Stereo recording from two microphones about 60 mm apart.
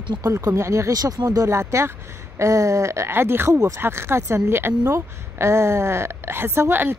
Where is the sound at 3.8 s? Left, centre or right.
Right.